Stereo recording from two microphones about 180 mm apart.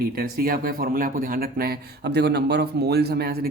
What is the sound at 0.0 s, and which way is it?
Speech, 55° right (ahead or behind).